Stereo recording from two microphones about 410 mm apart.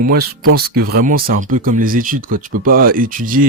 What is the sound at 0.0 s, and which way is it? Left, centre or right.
Speech, right.